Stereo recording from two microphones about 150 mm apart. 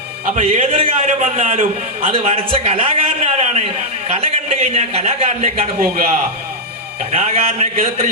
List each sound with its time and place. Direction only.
0.3 s a man's voice: 55° right (ahead or behind)
2.0 s a man's voice: 40° right (ahead or behind); by 6.1 s 60° right (ahead or behind)
7.1 s a man's voice: 50° right (ahead or behind)